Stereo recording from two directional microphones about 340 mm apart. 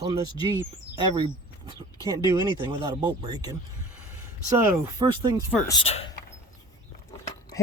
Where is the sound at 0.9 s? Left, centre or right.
Centre.